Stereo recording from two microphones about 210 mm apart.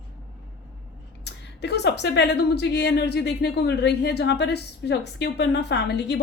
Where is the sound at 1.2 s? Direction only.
55° left (ahead or behind).